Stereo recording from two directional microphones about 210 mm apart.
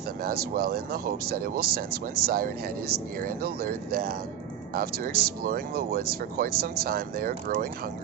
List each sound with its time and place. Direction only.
0.3 s speech: 45° right (ahead or behind)